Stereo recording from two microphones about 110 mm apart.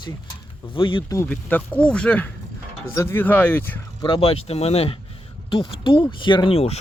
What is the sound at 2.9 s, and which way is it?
Speech, 25° left (ahead or behind).